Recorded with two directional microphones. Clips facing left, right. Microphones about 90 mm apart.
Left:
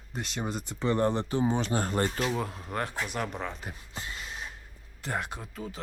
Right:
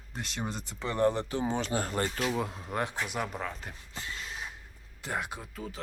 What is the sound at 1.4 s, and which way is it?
Speech, 15° left (ahead or behind).